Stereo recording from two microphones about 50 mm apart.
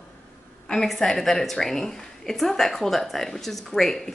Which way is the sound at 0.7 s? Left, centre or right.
Centre.